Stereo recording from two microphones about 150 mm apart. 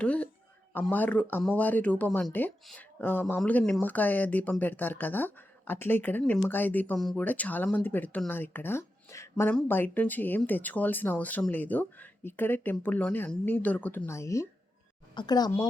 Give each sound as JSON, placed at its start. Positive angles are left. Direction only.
{"t": 0.0, "sound": "a woman's voice", "side_deg": 10}